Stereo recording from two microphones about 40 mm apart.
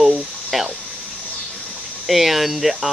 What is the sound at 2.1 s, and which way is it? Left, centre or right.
Speech, centre.